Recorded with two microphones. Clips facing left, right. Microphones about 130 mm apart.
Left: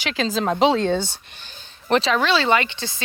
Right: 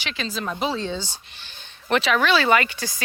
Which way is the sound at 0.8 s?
55° left (ahead or behind).